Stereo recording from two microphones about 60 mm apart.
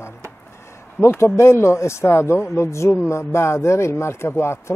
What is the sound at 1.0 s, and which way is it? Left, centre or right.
A man's voice, left.